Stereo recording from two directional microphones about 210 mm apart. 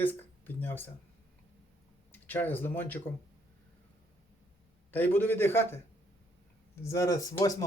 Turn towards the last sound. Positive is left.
turn(degrees=15)  # may be behind; listen again after turning